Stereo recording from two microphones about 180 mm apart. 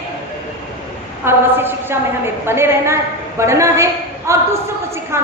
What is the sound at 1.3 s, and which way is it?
A woman's voice, 10° right (ahead or behind).